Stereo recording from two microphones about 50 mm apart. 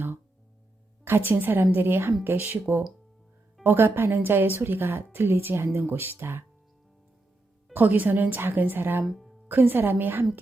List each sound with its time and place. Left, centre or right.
1.0 s speech: right
7.7 s a woman's voice: right
9.0 s speech: centre
9.5 s speech: right